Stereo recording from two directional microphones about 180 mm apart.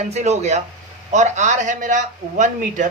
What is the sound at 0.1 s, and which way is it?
A man's voice, 40° right (ahead or behind).